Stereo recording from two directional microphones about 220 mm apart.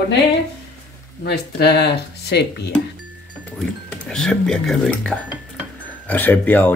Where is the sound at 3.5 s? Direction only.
5° left (ahead or behind).